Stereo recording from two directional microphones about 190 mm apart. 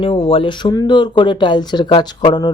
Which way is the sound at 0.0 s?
30° left (ahead or behind).